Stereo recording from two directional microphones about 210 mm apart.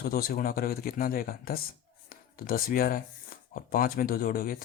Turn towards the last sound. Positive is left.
turn(degrees=45)  # may be behind; listen again after turning